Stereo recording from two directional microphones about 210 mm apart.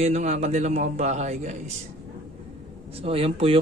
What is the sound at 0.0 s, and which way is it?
A man's voice, 35° right (ahead or behind).